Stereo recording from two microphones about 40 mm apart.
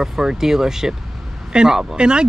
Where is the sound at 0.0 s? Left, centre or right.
Centre.